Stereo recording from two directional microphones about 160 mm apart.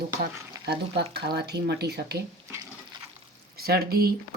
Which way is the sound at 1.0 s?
90° right.